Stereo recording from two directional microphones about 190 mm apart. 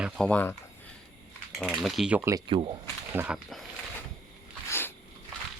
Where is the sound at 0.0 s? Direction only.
5° left (ahead or behind).